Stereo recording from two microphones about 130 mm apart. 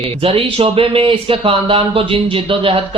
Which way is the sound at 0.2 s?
45° right (ahead or behind).